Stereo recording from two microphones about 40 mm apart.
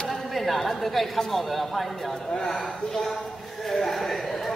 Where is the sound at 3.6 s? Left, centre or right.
Centre.